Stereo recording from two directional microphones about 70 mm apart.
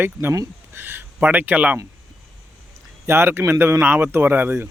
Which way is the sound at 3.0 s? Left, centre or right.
Right.